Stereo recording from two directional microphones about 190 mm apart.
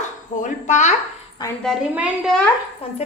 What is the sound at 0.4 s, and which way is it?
Speech, 40° left (ahead or behind).